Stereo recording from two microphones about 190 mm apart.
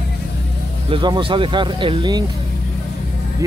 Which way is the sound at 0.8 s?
25° right (ahead or behind).